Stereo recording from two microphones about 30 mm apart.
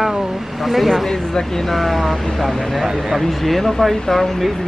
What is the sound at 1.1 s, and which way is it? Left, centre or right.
Speech, left.